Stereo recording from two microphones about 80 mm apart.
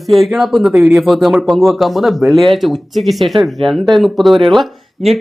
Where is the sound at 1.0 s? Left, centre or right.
Centre.